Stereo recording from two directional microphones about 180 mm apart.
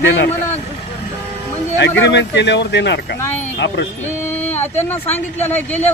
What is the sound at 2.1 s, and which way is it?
Speech, 80° left.